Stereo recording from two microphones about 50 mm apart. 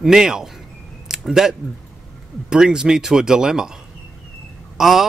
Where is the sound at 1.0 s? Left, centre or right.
Centre.